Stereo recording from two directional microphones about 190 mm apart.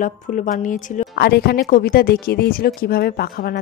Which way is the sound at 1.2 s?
55° left (ahead or behind).